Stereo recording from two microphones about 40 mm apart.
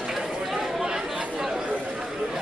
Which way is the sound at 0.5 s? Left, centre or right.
Centre.